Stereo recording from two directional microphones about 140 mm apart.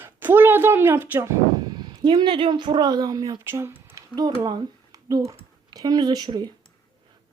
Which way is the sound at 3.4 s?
15° right (ahead or behind).